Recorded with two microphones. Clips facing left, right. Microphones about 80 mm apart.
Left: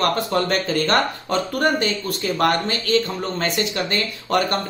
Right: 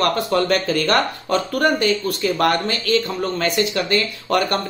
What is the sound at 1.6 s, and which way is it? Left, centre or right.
Speech, left.